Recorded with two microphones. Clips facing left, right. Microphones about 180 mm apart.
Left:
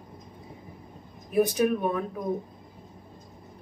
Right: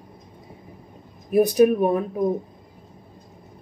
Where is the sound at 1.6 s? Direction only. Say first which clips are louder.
Right 8 dB; 45° right (ahead or behind).